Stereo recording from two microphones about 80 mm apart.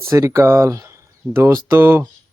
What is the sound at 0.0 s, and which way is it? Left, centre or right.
Speech, right.